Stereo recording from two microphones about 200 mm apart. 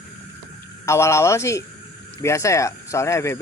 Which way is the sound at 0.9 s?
15° left (ahead or behind).